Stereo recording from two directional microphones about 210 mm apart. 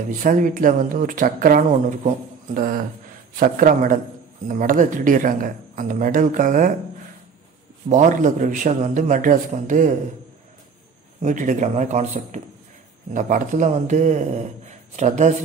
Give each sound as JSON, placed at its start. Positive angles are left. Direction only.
{"t": 0.2, "sound": "speech", "side_deg": -40}
{"t": 7.9, "sound": "speech", "side_deg": -35}
{"t": 11.2, "sound": "speech", "side_deg": -35}